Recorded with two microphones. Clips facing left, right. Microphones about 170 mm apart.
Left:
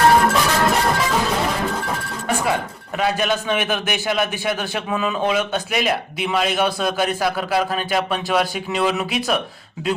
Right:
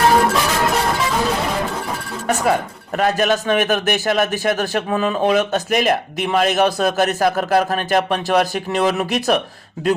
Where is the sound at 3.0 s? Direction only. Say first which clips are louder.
Right 3 dB; 40° right (ahead or behind).